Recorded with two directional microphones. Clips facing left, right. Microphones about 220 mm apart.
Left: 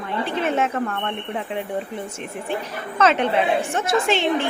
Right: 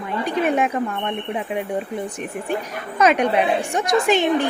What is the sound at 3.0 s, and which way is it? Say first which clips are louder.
A woman's voice: right 2 dB; 15° right (ahead or behind).